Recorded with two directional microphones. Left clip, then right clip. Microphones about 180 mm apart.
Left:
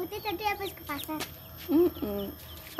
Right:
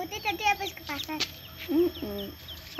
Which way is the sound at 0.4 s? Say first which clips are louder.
Right 5 dB; 40° right (ahead or behind).